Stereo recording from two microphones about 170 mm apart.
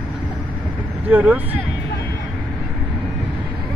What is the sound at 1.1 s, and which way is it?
Speech, 10° right (ahead or behind).